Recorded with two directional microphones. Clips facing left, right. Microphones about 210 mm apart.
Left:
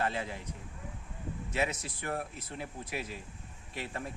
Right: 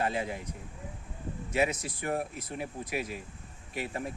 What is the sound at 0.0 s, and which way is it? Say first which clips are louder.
Speech: right 3 dB; 15° right (ahead or behind).